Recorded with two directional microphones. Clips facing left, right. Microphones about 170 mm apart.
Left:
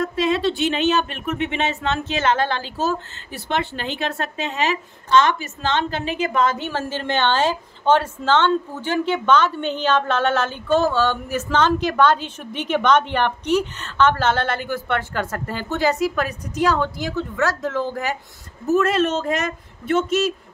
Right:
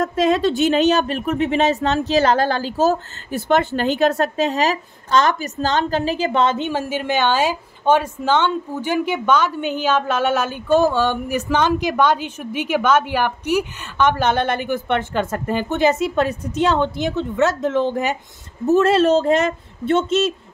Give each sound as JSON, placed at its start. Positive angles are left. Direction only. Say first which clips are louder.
{"t": 0.0, "sound": "speech", "louder": "right 3 dB", "side_deg": -45}
{"t": 6.7, "sound": "a woman's voice", "louder": "right 3 dB", "side_deg": -10}